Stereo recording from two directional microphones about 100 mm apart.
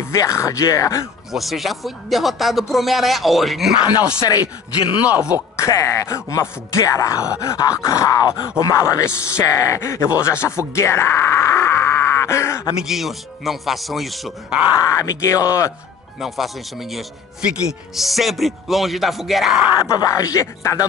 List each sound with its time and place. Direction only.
0.0 s speech: 30° left (ahead or behind)
1.3 s speech: centre (ahead or behind)
4.2 s speech: 40° left (ahead or behind)
5.1 s speech: 15° right (ahead or behind)
5.6 s speech: 30° left (ahead or behind)
12.8 s speech: centre (ahead or behind)
14.8 s speech: 35° left (ahead or behind)
16.2 s speech: centre (ahead or behind)
19.8 s speech: 30° left (ahead or behind)